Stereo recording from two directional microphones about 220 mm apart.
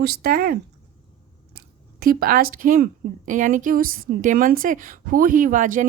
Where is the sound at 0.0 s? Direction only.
45° right (ahead or behind).